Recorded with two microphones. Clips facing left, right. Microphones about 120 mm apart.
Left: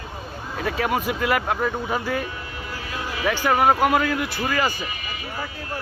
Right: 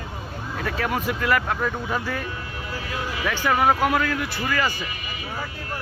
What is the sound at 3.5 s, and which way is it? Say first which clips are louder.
Speech: left 2 dB; 15° left (ahead or behind).